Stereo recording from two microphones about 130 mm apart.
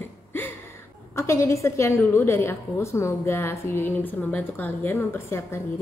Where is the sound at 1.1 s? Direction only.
20° left (ahead or behind).